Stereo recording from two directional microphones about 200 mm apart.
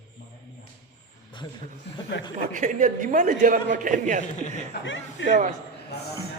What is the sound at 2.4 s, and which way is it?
A man's voice, 40° right (ahead or behind).